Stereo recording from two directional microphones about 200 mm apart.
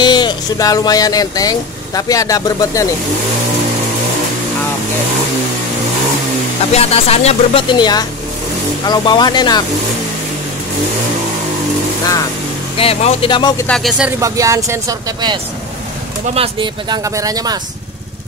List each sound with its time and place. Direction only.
0.0 s speech: 20° left (ahead or behind)
6.7 s speech: 30° left (ahead or behind)
12.7 s speech: 30° left (ahead or behind)
13.7 s speech: centre (ahead or behind)
14.2 s speech: 15° right (ahead or behind)
16.3 s speech: 25° right (ahead or behind)